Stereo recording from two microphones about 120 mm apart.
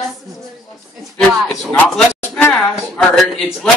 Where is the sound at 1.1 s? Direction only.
5° left (ahead or behind).